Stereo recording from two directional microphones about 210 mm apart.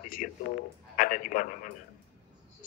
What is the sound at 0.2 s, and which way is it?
A man's voice, 40° left (ahead or behind).